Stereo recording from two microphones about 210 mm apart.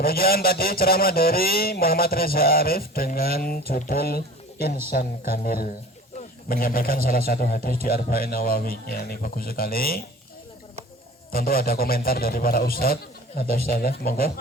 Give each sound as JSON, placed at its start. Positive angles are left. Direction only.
{"t": 0.0, "sound": "a man's voice", "side_deg": 45}
{"t": 11.3, "sound": "a man's voice", "side_deg": 45}